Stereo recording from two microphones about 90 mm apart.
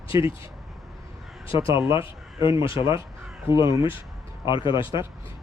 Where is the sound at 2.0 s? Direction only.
70° left (ahead or behind).